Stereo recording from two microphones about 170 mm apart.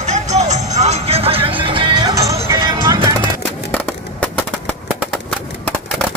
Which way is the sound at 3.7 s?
10° left (ahead or behind).